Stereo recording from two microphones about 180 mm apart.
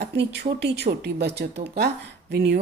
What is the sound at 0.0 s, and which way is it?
Speech, 70° right (ahead or behind).